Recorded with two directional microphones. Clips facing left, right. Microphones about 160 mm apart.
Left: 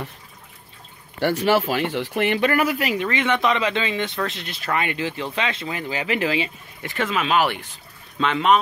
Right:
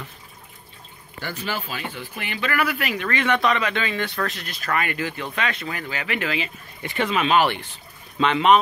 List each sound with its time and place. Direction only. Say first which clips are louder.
1.2 s speech: left 11 dB; 75° left (ahead or behind)
3.1 s speech: right 2 dB; 20° left (ahead or behind)
6.8 s speech: right 1 dB; centre (ahead or behind)